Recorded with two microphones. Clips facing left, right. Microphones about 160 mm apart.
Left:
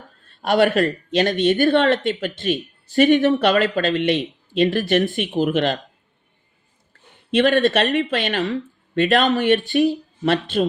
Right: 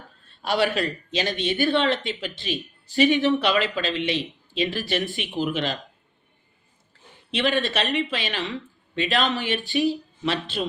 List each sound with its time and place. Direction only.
0.4 s speech: 50° left (ahead or behind)
7.3 s speech: 50° left (ahead or behind)